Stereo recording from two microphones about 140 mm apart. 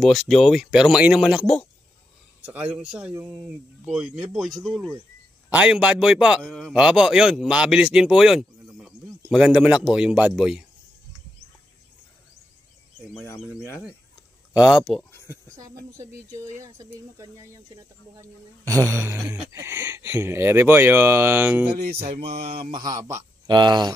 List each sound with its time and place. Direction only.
0.0 s speech: centre (ahead or behind)
2.4 s speech: 10° right (ahead or behind)
5.5 s speech: 10° right (ahead or behind)
6.4 s speech: 5° left (ahead or behind)
14.7 s speech: centre (ahead or behind)
15.2 s speech: 25° right (ahead or behind)
21.9 s mantra: 45° right (ahead or behind)
22.7 s speech: 30° right (ahead or behind)
23.4 s speech: 30° right (ahead or behind)